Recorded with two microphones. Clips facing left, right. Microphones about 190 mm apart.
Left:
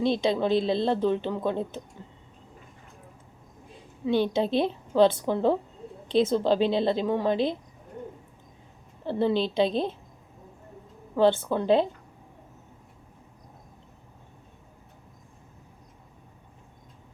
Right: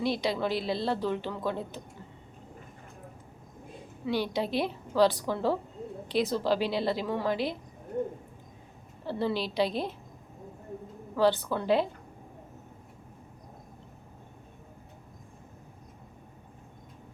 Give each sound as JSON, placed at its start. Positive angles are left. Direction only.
{"t": 0.0, "sound": "a woman's voice", "side_deg": 25}
{"t": 4.0, "sound": "a woman's voice", "side_deg": 25}
{"t": 9.0, "sound": "a woman's voice", "side_deg": 20}
{"t": 11.2, "sound": "a woman's voice", "side_deg": 25}